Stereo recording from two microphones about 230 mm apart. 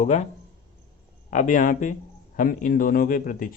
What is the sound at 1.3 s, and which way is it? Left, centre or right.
Speech, left.